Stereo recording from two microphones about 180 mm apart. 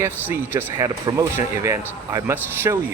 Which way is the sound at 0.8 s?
20° right (ahead or behind).